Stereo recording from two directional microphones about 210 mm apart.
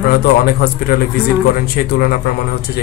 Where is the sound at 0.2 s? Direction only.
45° left (ahead or behind).